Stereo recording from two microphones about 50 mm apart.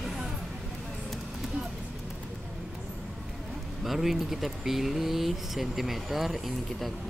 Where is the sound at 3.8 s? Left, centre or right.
Centre.